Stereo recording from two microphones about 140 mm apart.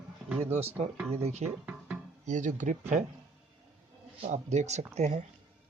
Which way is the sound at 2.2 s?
60° right (ahead or behind).